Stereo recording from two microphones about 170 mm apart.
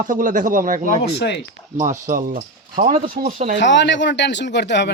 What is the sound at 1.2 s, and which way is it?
Speech, 90° left.